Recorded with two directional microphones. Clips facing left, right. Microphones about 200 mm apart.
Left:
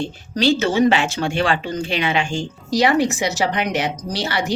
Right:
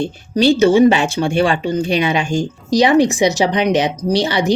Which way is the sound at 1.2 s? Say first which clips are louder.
Right 5 dB; 15° right (ahead or behind).